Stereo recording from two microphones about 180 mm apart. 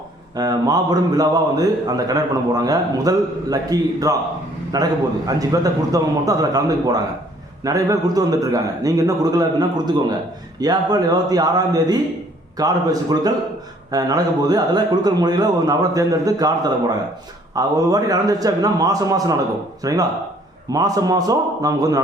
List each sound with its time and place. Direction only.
0.3 s a man's voice: 20° right (ahead or behind)